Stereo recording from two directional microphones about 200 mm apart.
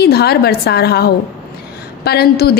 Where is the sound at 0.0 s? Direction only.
50° left (ahead or behind).